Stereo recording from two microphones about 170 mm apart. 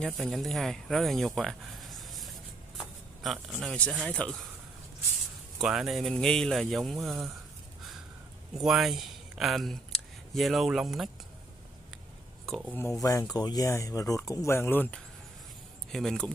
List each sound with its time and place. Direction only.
0.0 s speech: centre (ahead or behind)
2.8 s a sound: centre (ahead or behind)
3.6 s speech: 5° left (ahead or behind)
5.6 s speech: centre (ahead or behind)
8.5 s speech: centre (ahead or behind)
12.4 s speech: centre (ahead or behind)
13.0 s speech: 20° left (ahead or behind); by 16.3 s 5° left (ahead or behind)